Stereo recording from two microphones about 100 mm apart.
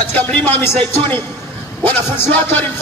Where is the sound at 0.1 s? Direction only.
20° left (ahead or behind).